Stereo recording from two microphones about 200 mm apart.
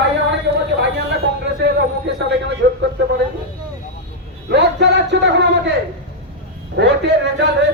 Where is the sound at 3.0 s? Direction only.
60° right (ahead or behind).